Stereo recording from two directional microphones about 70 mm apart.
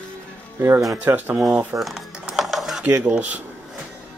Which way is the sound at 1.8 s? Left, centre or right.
Centre.